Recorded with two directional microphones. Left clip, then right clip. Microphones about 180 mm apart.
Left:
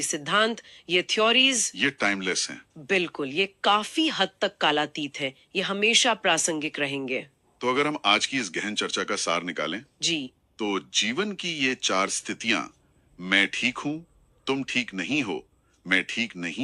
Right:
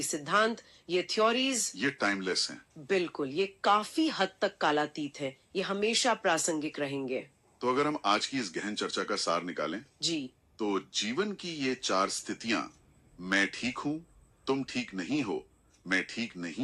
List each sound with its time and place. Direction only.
0.0 s a woman's voice: 20° left (ahead or behind)